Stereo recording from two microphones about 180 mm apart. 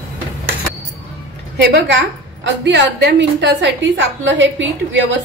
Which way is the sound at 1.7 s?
80° right.